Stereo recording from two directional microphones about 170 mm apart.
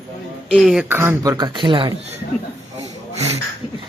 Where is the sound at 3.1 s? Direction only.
40° right (ahead or behind).